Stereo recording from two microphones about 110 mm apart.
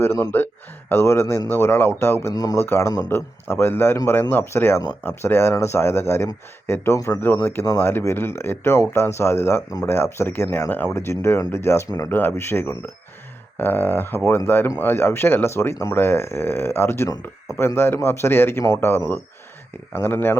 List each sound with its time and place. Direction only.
0.0 s speech: 20° left (ahead or behind)
2.3 s speech: 35° left (ahead or behind)
2.6 s speech: 25° left (ahead or behind)